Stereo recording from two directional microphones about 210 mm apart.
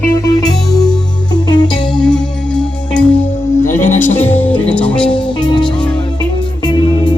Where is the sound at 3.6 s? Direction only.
10° left (ahead or behind).